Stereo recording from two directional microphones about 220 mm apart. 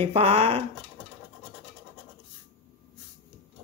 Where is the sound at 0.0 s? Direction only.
30° right (ahead or behind).